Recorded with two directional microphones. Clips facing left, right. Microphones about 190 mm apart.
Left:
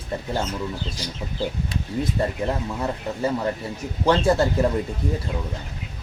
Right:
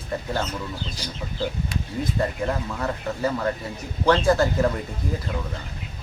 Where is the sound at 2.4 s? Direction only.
20° left (ahead or behind).